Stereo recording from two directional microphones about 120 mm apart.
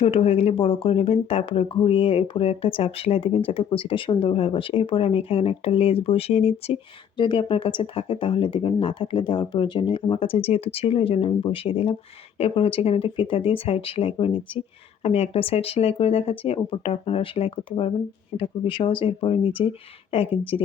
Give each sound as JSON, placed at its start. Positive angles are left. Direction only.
{"t": 0.0, "sound": "speech", "side_deg": 55}
{"t": 7.2, "sound": "speech", "side_deg": 45}